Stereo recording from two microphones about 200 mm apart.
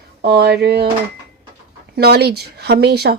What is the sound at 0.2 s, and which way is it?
Speech, 50° right (ahead or behind).